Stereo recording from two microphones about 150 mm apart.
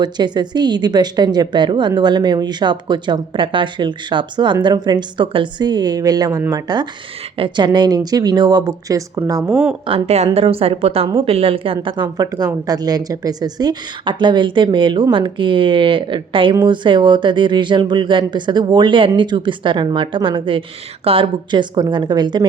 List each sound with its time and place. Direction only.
0.0 s a woman's voice: 30° right (ahead or behind)
9.8 s a woman's voice: 40° right (ahead or behind)